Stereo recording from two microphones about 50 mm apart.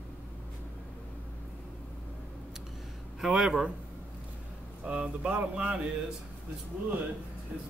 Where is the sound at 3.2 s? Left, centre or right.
Centre.